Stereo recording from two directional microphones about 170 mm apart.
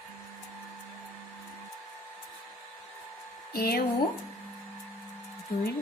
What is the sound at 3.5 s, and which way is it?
Speech, 65° left (ahead or behind).